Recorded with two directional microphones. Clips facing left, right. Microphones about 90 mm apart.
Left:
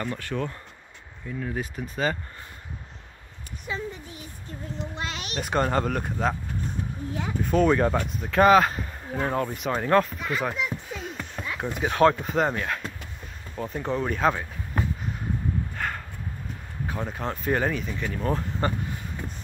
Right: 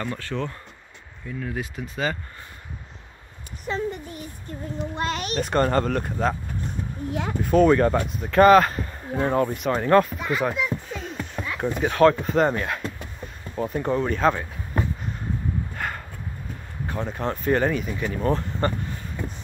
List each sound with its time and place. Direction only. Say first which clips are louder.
0.0 s speech: right 1 dB; 15° left (ahead or behind)
3.6 s a child's voice: right 6 dB; 55° right (ahead or behind)
5.4 s speech: right 2 dB; 5° left (ahead or behind)
7.1 s speech: right 5 dB; 70° right (ahead or behind)
7.5 s speech: right 4 dB; centre (ahead or behind)
15.7 s a sound: even; 5° right (ahead or behind)
16.8 s speech: right 3 dB; 5° left (ahead or behind)
17.8 s speech: right 4 dB; 10° right (ahead or behind)
18.6 s speech: right 2 dB; 5° left (ahead or behind)